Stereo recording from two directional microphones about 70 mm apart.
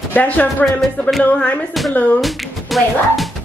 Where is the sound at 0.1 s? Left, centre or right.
Left.